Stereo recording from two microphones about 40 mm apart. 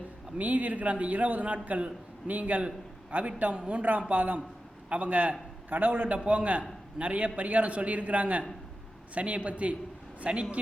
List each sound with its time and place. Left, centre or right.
0.3 s a man's voice: right